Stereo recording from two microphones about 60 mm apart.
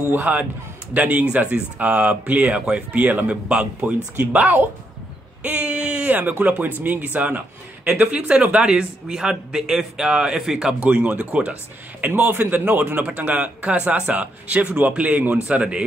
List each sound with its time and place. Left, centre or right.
0.1 s a man's voice: right
3.4 s a man's voice: centre
10.8 s a man's voice: centre